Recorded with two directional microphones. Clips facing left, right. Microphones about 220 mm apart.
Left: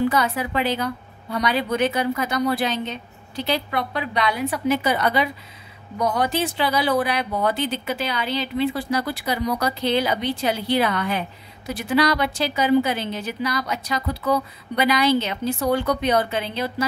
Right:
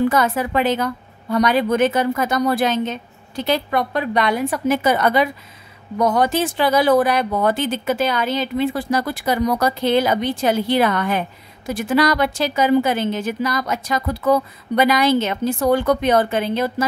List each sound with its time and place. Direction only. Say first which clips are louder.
0.1 s speech: right 4 dB; 50° right (ahead or behind)